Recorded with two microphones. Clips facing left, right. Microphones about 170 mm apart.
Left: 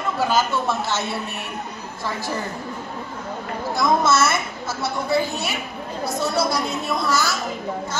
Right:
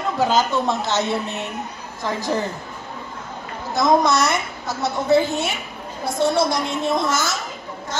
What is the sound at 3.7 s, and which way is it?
A woman's voice, 20° right (ahead or behind).